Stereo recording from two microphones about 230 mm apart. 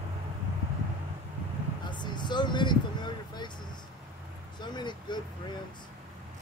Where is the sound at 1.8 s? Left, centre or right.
Centre.